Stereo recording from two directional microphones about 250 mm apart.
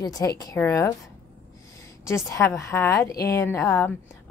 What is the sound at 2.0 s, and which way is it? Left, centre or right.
A woman's voice, centre.